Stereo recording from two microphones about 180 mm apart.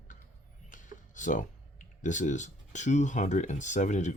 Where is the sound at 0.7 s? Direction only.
45° left (ahead or behind).